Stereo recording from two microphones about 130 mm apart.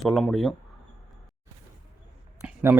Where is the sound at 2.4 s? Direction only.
15° right (ahead or behind).